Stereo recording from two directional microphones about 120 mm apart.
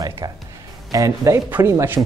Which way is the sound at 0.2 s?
30° right (ahead or behind).